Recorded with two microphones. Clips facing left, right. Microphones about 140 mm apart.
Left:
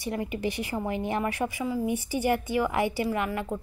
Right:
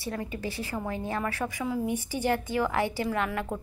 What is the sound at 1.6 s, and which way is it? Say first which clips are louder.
A woman's voice: even; 5° left (ahead or behind).